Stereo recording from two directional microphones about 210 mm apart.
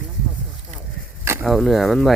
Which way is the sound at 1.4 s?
Centre (ahead or behind).